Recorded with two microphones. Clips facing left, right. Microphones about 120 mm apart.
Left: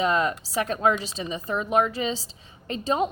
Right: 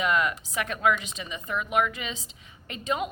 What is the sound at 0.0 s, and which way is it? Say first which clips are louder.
A woman's voice: left 3 dB; 35° left (ahead or behind).